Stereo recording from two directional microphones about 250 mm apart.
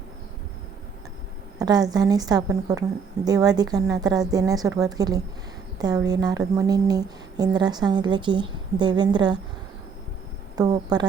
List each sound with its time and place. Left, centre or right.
1.5 s a woman's voice: centre
10.5 s a woman's voice: centre